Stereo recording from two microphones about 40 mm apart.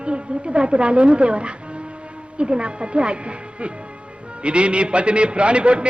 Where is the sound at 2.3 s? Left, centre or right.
Right.